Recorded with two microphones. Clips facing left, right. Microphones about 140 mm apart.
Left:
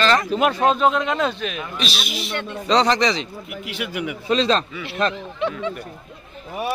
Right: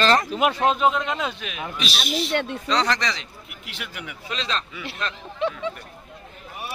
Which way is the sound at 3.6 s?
5° left (ahead or behind).